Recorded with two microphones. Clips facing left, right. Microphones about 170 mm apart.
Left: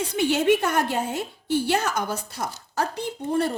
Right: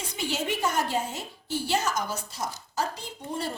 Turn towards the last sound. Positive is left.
turn(degrees=60)  # may be behind; listen again after turning